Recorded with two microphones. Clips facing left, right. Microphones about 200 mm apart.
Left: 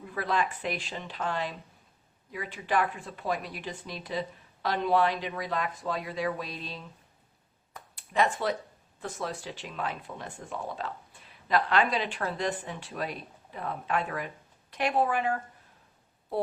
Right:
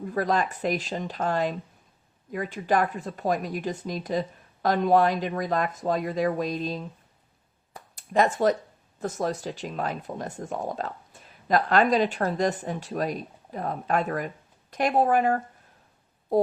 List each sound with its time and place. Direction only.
0.0 s speech: 40° right (ahead or behind)
7.7 s a sound: 45° right (ahead or behind)
9.0 s speech: 40° right (ahead or behind)